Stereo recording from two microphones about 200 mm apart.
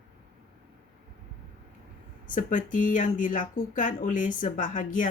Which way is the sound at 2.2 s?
40° left (ahead or behind).